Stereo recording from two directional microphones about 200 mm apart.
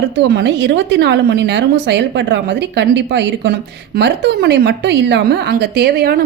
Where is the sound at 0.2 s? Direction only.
60° right (ahead or behind).